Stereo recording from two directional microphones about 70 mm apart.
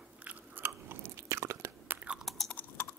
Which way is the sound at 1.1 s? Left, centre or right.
Right.